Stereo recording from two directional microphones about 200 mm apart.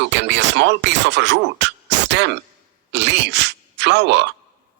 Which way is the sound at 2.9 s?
60° right (ahead or behind).